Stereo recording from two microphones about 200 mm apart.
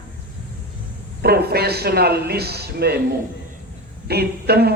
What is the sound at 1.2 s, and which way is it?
Speech, 55° right (ahead or behind).